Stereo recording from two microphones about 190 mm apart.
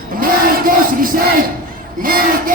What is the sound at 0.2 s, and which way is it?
Crowd, 45° right (ahead or behind).